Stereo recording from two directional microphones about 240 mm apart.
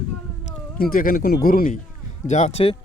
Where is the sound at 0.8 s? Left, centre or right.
Left.